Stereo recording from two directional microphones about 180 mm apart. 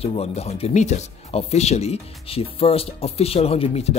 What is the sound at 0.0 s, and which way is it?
Speech, 35° left (ahead or behind).